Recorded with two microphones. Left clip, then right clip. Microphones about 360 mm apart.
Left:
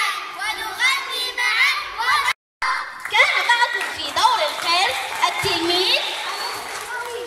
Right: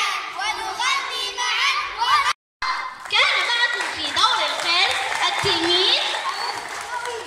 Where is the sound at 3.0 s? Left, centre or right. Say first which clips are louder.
Left 2 dB; centre.